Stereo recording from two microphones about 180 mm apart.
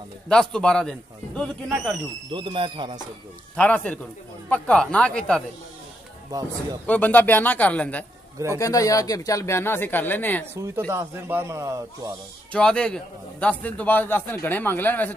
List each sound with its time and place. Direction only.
0.3 s speech: 5° left (ahead or behind)
2.3 s a man's voice: 25° right (ahead or behind)
3.5 s a man's voice: 10° left (ahead or behind)
6.3 s a man's voice: 20° right (ahead or behind)
6.9 s a man's voice: 10° left (ahead or behind)
8.5 s a man's voice: 20° left (ahead or behind)
10.9 s a man's voice: 15° right (ahead or behind)
12.5 s a man's voice: 5° left (ahead or behind)